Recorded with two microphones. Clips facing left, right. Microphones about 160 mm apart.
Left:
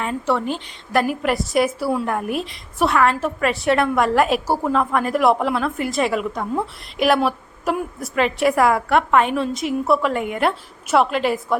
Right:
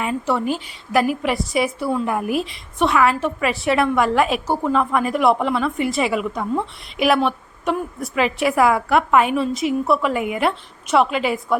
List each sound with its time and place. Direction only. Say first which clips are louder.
0.0 s a woman's voice: even; 5° right (ahead or behind)